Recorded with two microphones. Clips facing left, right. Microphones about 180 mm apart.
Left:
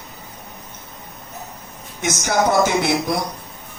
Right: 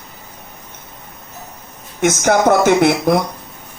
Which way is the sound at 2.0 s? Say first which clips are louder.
Right 6 dB; 55° right (ahead or behind).